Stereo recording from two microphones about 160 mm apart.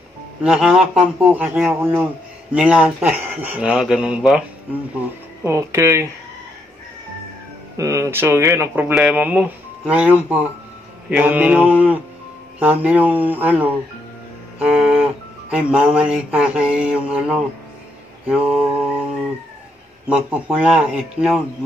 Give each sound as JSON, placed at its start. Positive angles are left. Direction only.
{"t": 0.4, "sound": "speech", "side_deg": -5}
{"t": 4.9, "sound": "speech", "side_deg": -15}
{"t": 7.7, "sound": "speech", "side_deg": -20}
{"t": 14.6, "sound": "music", "side_deg": -5}
{"t": 15.5, "sound": "speech", "side_deg": -5}
{"t": 20.1, "sound": "a man's voice", "side_deg": -5}